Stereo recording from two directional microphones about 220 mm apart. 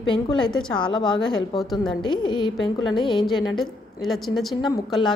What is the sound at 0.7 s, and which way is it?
Music, 20° left (ahead or behind).